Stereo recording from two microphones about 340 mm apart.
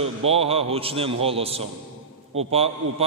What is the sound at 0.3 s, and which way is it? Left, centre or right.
A man's voice, centre.